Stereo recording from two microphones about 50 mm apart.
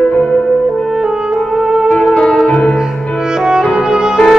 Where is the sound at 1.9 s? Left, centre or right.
Left.